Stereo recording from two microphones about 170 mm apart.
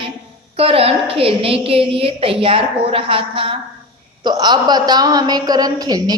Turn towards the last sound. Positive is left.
turn(degrees=-20)  # may be behind; listen again after turning